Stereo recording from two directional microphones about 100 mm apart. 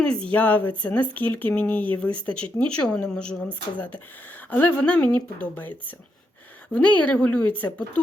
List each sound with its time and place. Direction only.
0.0 s speech: 10° left (ahead or behind)
6.7 s speech: 15° left (ahead or behind)